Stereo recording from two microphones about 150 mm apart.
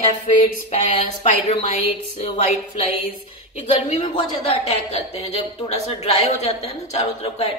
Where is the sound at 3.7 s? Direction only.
40° left (ahead or behind).